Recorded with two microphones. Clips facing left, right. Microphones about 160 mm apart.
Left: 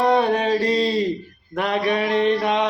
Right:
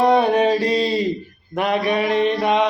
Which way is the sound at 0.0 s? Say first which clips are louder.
Right 3 dB; 15° right (ahead or behind).